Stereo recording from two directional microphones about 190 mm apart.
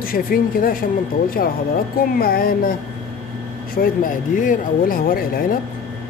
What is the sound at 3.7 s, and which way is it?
Speech, 50° left (ahead or behind).